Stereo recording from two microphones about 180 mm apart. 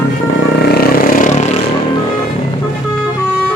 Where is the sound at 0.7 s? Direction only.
55° left (ahead or behind).